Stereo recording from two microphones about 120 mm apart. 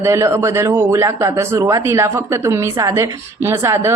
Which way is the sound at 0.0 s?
25° right (ahead or behind).